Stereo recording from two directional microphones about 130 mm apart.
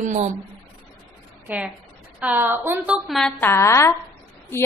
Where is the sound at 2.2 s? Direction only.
15° right (ahead or behind).